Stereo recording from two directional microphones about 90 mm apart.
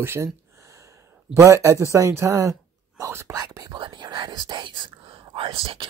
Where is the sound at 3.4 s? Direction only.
45° right (ahead or behind); by 5.9 s 90° right.